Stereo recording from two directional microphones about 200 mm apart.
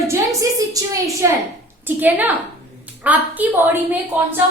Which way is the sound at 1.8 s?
10° right (ahead or behind).